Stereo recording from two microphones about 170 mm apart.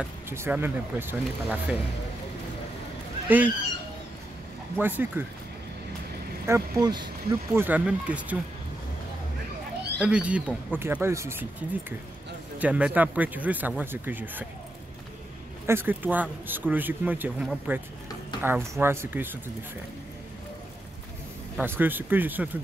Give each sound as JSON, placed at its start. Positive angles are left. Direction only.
{"t": 0.3, "sound": "speech", "side_deg": -15}
{"t": 3.3, "sound": "speech", "side_deg": -10}
{"t": 4.7, "sound": "speech", "side_deg": -10}
{"t": 6.4, "sound": "speech", "side_deg": -15}
{"t": 7.5, "sound": "speech", "side_deg": -10}
{"t": 9.9, "sound": "speech", "side_deg": -5}
{"t": 12.5, "sound": "speech", "side_deg": -10}
{"t": 15.6, "sound": "speech", "side_deg": -15}
{"t": 21.5, "sound": "speech", "side_deg": -10}